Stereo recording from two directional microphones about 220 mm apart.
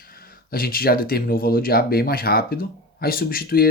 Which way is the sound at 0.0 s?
40° left (ahead or behind).